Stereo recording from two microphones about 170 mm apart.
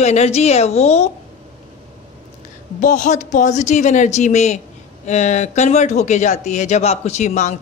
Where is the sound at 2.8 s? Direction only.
45° left (ahead or behind).